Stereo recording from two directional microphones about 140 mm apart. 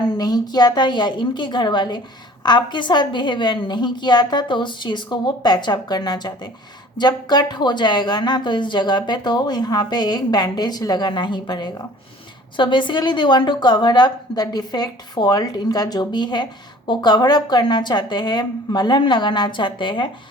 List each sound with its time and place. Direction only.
0.2 s a woman's voice: 30° left (ahead or behind)